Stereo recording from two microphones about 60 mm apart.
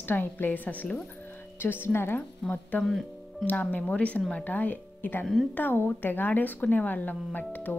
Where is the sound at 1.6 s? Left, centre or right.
Left.